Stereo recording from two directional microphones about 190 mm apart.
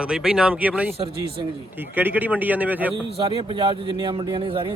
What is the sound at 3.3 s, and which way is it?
Speech, 25° right (ahead or behind).